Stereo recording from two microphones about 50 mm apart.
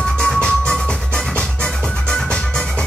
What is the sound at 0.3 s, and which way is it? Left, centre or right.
Music, centre.